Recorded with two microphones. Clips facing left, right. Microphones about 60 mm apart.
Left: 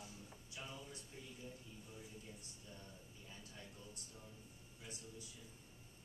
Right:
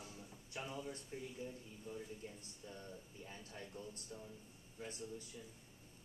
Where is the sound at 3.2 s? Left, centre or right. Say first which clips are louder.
Right 4 dB; right.